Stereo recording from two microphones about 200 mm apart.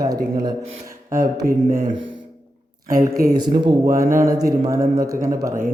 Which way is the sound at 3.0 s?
15° right (ahead or behind).